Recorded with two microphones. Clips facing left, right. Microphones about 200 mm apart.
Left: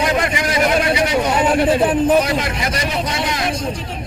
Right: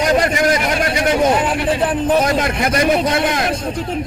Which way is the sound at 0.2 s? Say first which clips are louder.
Right 4 dB; 45° right (ahead or behind).